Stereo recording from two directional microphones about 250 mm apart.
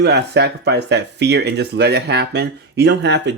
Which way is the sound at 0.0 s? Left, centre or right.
Right.